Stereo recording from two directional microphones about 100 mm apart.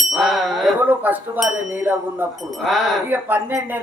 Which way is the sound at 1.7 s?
20° right (ahead or behind).